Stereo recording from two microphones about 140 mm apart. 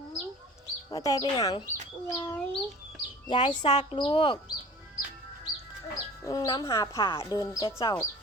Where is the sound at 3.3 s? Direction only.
35° left (ahead or behind).